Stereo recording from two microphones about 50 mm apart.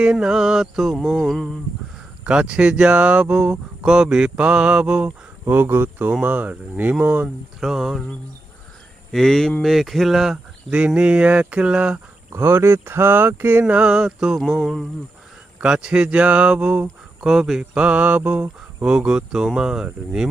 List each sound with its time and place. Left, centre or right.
0.0 s mantra: centre
2.2 s speech: centre
5.5 s speech: right
6.2 s speech: right
7.6 s mantra: centre
9.1 s speech: centre
9.6 s mantra: centre
10.7 s speech: right
12.3 s speech: right; by 14.3 s centre
14.3 s mantra: centre
15.6 s speech: centre
17.2 s mantra: centre
17.6 s speech: right